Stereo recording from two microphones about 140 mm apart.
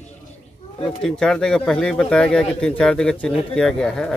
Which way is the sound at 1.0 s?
5° left (ahead or behind).